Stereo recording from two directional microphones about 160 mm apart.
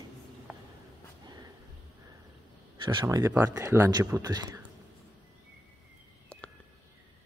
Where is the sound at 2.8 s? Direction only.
30° right (ahead or behind).